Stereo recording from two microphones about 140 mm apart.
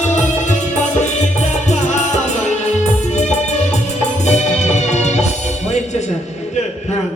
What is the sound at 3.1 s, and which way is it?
Music, 55° left (ahead or behind).